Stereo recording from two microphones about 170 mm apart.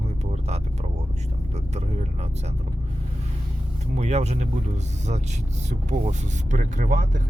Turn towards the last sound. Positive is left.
turn(degrees=-45)  # may be behind; listen again after turning